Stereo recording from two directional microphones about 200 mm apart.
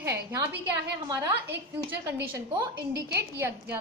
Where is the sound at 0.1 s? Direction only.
15° right (ahead or behind).